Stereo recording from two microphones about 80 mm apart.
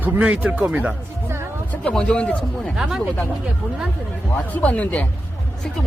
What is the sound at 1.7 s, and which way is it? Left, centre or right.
Speech, centre.